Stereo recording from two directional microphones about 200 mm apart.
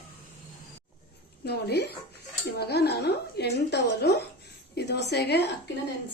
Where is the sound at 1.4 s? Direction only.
55° left (ahead or behind).